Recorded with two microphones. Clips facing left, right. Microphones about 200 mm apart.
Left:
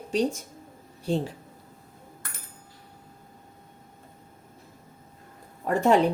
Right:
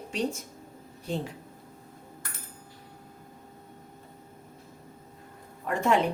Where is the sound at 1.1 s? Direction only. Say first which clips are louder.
Left 6 dB; 30° left (ahead or behind).